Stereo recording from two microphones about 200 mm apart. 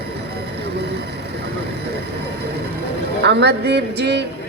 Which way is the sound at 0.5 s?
55° right (ahead or behind).